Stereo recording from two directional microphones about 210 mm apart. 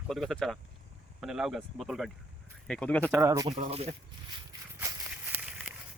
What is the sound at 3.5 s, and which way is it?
Speech, 30° right (ahead or behind).